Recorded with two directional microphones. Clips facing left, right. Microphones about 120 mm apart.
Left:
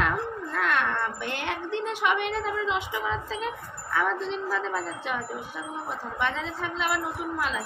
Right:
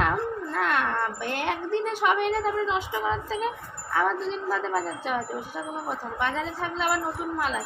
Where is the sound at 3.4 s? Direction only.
35° right (ahead or behind).